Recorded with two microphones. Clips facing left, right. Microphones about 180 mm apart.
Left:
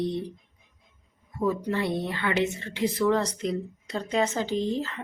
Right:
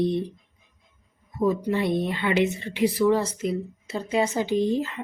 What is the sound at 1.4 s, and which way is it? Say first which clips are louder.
A woman's voice: right 3 dB; 15° right (ahead or behind).